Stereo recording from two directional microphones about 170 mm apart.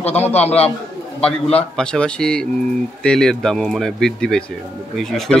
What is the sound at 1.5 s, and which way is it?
A man's voice, 5° left (ahead or behind).